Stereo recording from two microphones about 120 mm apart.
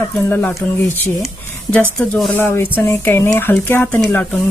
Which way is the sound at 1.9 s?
10° left (ahead or behind).